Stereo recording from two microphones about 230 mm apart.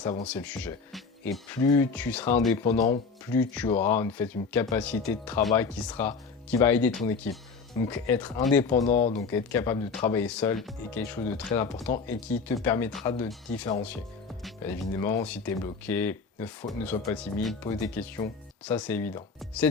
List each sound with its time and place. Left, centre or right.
0.0 s speech: centre
0.3 s speech: centre
8.9 s speech: left
9.1 s speech: centre
17.7 s speech: centre